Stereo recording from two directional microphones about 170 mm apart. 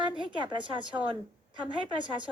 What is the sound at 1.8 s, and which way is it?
Speech, 30° right (ahead or behind).